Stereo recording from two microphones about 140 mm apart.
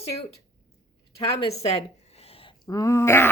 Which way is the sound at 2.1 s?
45° left (ahead or behind).